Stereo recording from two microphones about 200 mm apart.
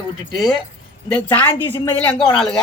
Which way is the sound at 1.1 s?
10° left (ahead or behind).